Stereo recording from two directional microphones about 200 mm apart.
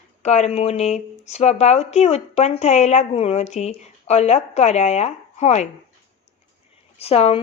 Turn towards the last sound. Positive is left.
turn(degrees=30)  # may be behind; listen again after turning